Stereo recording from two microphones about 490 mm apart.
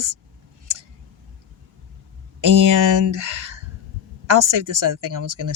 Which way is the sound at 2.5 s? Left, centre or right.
Right.